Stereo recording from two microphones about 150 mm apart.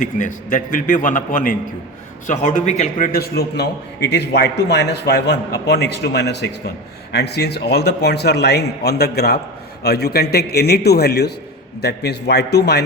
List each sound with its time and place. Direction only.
0.0 s a man's voice: 60° left (ahead or behind)
3.1 s a man's voice: 90° left